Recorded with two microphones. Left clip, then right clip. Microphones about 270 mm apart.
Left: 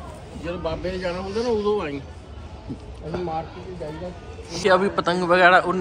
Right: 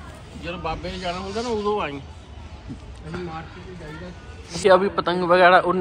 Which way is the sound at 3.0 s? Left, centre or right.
Centre.